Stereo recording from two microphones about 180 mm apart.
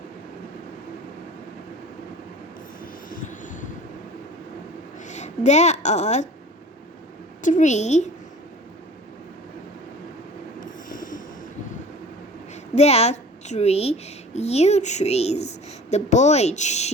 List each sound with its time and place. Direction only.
2.8 s train: 50° left (ahead or behind)
5.0 s a woman's voice: 40° left (ahead or behind)
7.4 s a woman's voice: 45° left (ahead or behind)
10.8 s train: 50° left (ahead or behind)
12.7 s a woman's voice: 35° left (ahead or behind)